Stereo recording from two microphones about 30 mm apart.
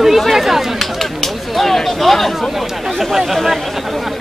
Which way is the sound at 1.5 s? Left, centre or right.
Centre.